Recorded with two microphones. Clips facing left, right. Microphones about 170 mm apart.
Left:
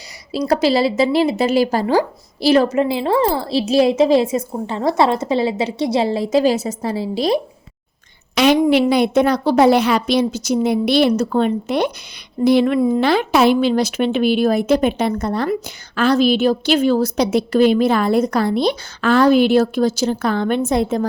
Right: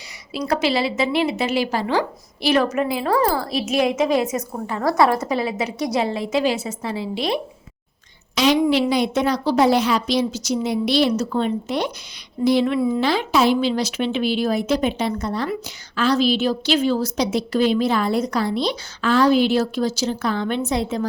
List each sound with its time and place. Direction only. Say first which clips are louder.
0.3 s a woman's voice: left 5 dB; 35° left (ahead or behind)
8.4 s a woman's voice: left 4 dB; 55° left (ahead or behind)